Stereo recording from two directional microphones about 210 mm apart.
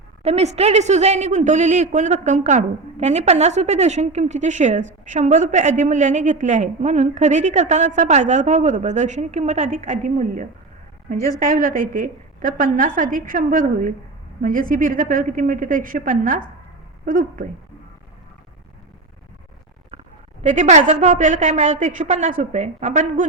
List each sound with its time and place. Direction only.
0.2 s a woman's voice: 30° right (ahead or behind)
20.4 s a woman's voice: 35° right (ahead or behind)